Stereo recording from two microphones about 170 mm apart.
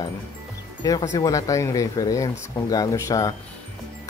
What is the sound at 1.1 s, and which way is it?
Speech, 20° left (ahead or behind).